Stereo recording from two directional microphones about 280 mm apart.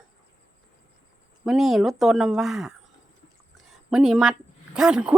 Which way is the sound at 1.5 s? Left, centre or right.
Centre.